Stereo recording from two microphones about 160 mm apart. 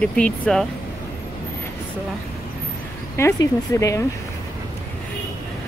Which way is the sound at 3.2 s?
20° left (ahead or behind).